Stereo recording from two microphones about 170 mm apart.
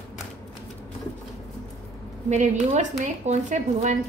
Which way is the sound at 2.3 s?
45° right (ahead or behind).